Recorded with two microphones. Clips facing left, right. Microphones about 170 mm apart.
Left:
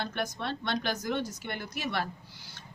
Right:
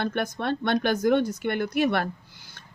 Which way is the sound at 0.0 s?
55° right (ahead or behind).